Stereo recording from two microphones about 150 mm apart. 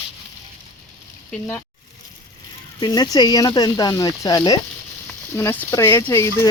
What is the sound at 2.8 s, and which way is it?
Speech, 25° left (ahead or behind).